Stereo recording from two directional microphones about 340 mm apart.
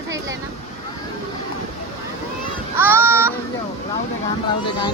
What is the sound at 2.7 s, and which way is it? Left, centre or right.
Speech, centre.